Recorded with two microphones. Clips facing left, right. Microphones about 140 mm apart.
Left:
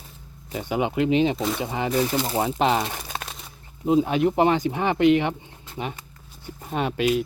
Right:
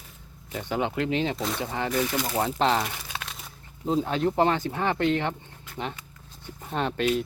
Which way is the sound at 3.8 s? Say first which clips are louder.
Left 5 dB; 15° left (ahead or behind).